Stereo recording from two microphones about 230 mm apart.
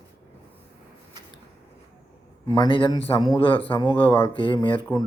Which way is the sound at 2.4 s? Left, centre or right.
Centre.